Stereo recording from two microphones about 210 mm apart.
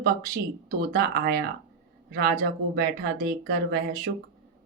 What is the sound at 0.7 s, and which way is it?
Speech, 50° right (ahead or behind).